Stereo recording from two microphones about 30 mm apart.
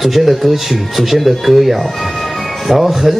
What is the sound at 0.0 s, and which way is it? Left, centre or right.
Speech, centre.